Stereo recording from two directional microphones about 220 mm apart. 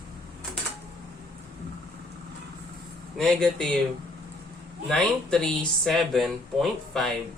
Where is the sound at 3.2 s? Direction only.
Centre (ahead or behind).